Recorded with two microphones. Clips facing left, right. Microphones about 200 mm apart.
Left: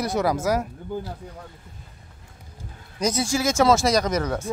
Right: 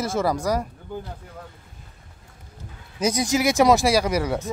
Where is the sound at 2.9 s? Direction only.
10° right (ahead or behind).